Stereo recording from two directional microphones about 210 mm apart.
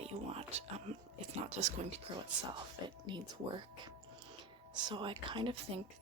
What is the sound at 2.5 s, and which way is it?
Speech, 20° right (ahead or behind).